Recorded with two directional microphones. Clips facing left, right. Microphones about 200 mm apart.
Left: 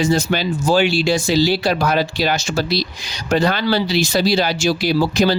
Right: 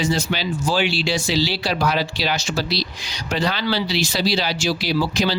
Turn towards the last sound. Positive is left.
turn(degrees=50)  # may be behind; listen again after turning